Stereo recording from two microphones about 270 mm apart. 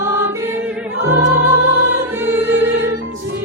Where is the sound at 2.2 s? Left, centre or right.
Centre.